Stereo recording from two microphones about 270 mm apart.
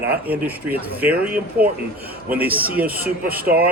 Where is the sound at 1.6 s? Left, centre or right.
Right.